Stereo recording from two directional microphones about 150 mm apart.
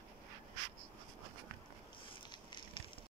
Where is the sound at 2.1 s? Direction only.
30° left (ahead or behind).